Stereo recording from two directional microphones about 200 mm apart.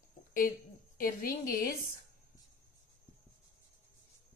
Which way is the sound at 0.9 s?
45° left (ahead or behind).